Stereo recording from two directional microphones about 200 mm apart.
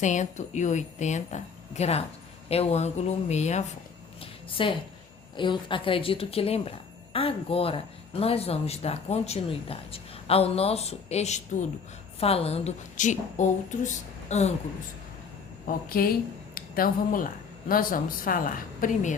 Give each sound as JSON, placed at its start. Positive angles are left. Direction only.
{"t": 0.0, "sound": "a woman's voice", "side_deg": 35}
{"t": 4.2, "sound": "a sound", "side_deg": 25}
{"t": 5.4, "sound": "a woman's voice", "side_deg": 25}
{"t": 15.6, "sound": "a woman's voice", "side_deg": 45}